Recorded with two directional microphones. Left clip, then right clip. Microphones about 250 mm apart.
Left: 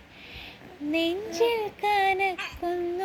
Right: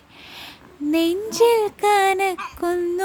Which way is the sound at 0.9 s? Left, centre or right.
Right.